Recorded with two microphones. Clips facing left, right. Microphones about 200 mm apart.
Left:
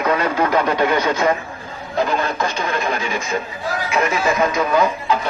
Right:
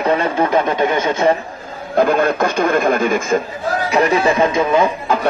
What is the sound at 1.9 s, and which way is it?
Speech, 55° right (ahead or behind).